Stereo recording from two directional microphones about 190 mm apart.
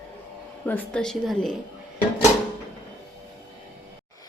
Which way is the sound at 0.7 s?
5° left (ahead or behind).